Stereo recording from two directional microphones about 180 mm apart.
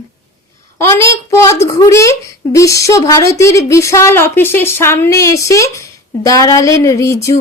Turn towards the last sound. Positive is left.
turn(degrees=15)  # may be behind; listen again after turning